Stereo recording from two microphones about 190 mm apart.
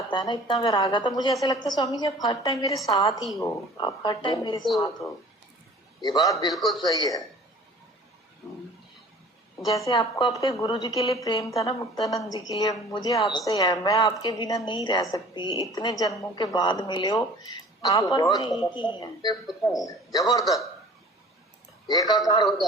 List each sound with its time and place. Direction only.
0.1 s a woman's voice: 25° left (ahead or behind)
6.5 s speech: centre (ahead or behind)
6.8 s a woman's voice: 20° left (ahead or behind)
9.6 s a woman's voice: 15° left (ahead or behind)
21.8 s a woman's voice: 20° left (ahead or behind)